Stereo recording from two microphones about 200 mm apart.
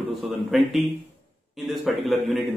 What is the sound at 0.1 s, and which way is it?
Speech, centre (ahead or behind).